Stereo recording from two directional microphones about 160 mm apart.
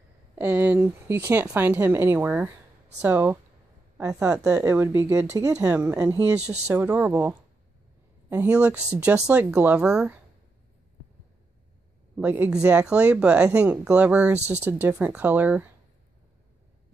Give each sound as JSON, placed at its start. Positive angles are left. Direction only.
{"t": 0.4, "sound": "a woman's voice", "side_deg": -10}
{"t": 5.8, "sound": "speech", "side_deg": -10}
{"t": 6.0, "sound": "a woman's voice", "side_deg": -20}
{"t": 12.2, "sound": "speech", "side_deg": -10}